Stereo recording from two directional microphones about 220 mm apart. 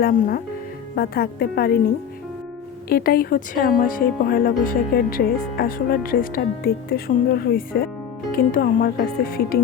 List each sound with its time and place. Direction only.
0.0 s a woman's voice: 40° left (ahead or behind)
2.9 s speech: 45° left (ahead or behind)